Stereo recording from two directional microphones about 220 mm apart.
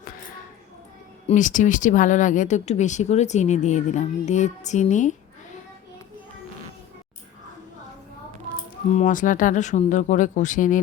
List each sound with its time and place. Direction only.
1.3 s speech: 35° left (ahead or behind)
9.0 s speech: 35° left (ahead or behind)